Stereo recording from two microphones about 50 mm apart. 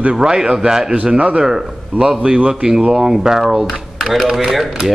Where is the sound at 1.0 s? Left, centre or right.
Right.